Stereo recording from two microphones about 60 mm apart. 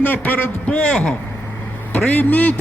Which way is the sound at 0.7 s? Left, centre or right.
Centre.